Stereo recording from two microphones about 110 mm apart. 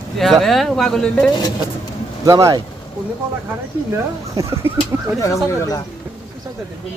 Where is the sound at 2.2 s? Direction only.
35° right (ahead or behind).